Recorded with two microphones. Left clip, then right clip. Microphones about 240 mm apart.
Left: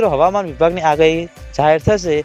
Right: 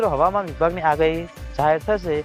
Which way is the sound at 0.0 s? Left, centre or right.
Left.